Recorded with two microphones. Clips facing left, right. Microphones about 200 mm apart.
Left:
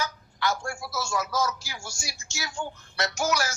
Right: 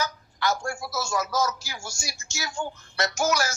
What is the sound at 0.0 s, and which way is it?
A man's voice, 40° right (ahead or behind).